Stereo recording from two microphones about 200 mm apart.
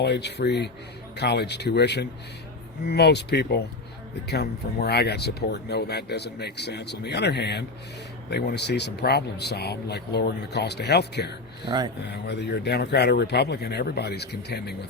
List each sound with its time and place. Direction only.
0.0 s speech: 55° left (ahead or behind)